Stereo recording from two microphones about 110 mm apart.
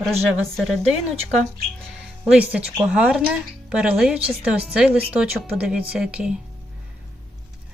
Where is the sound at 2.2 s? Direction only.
15° right (ahead or behind).